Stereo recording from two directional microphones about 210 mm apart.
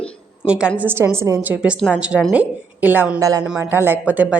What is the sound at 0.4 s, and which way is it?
Speech, 5° right (ahead or behind).